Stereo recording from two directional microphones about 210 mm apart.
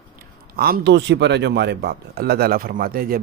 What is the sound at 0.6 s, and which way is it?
Speech, 50° right (ahead or behind).